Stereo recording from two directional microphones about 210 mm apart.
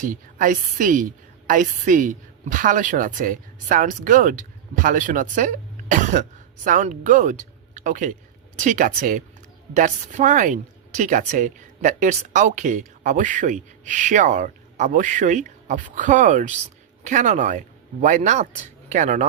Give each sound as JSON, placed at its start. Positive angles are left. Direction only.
{"t": 0.0, "sound": "speech", "side_deg": -40}